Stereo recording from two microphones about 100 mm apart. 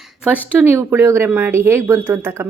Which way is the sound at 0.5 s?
20° right (ahead or behind).